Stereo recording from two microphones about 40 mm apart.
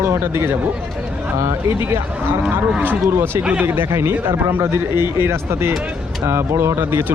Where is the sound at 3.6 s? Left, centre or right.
Right.